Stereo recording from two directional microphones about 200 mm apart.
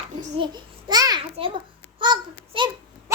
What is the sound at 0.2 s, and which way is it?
Babbling, 25° right (ahead or behind).